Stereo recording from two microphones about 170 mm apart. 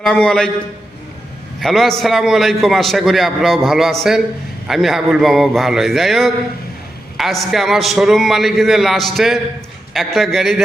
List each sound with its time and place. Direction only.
0.0 s a man's voice: 5° left (ahead or behind)
1.6 s a man's voice: centre (ahead or behind)